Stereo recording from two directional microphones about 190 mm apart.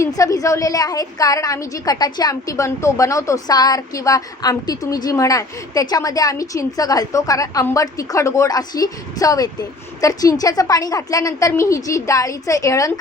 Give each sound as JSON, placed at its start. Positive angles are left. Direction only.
{"t": 0.0, "sound": "a woman's voice", "side_deg": 15}